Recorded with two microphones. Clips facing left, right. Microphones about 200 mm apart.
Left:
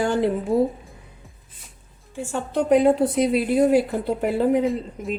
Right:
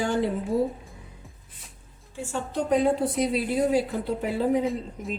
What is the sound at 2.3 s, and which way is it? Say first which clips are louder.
A woman's voice: left 6 dB; 65° left (ahead or behind).